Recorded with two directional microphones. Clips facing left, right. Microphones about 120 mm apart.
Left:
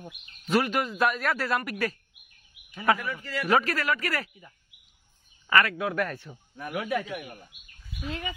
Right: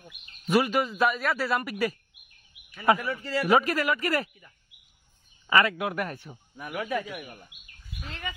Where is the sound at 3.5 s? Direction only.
15° right (ahead or behind).